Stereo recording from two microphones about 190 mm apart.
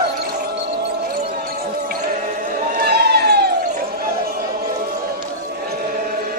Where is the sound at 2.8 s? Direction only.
60° right (ahead or behind).